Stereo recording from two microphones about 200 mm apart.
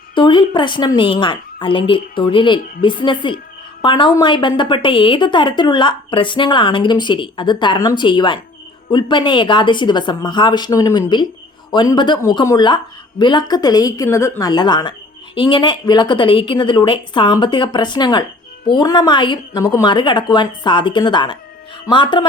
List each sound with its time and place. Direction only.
0.1 s a woman's voice: 25° left (ahead or behind)